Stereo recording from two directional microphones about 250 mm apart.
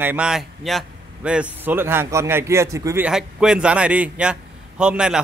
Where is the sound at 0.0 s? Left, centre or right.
Centre.